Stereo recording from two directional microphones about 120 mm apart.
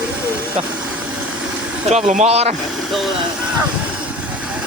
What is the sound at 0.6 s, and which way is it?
Speech, 60° right (ahead or behind).